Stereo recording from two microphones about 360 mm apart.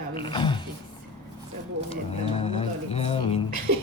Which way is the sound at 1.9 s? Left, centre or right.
Centre.